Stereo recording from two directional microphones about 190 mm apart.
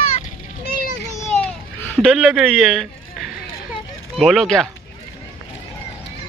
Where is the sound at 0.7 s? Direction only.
50° left (ahead or behind).